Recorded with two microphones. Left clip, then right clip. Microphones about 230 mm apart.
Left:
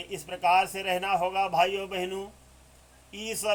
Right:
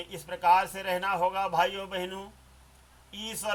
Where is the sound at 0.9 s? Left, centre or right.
Right.